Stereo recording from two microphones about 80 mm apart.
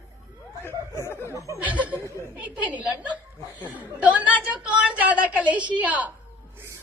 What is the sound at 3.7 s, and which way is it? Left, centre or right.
Speech, centre.